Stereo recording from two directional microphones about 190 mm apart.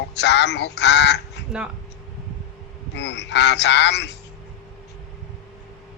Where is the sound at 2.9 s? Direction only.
65° left (ahead or behind).